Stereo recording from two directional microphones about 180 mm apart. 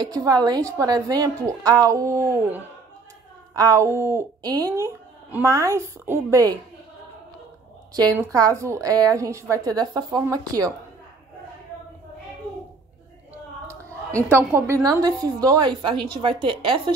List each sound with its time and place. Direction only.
0.0 s a woman's voice: 20° right (ahead or behind)
7.9 s a woman's voice: 20° right (ahead or behind)
14.3 s a woman's voice: 15° right (ahead or behind)